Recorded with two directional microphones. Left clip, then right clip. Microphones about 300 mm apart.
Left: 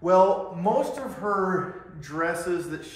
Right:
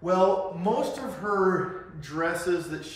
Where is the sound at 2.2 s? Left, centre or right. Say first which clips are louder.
Left 1 dB; centre.